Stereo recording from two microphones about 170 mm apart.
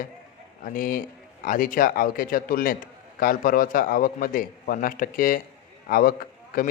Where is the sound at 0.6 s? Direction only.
55° left (ahead or behind).